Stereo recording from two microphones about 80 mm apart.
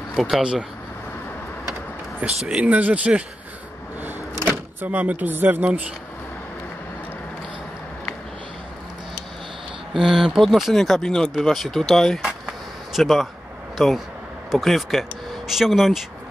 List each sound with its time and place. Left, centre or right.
0.1 s speech: centre
2.1 s speech: centre
4.0 s power windows: right
10.0 s speech: centre
12.3 s a sound: centre
13.7 s speech: centre